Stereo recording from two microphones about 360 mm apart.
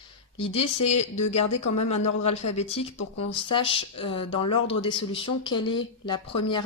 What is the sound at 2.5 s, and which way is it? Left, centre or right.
Speech, centre.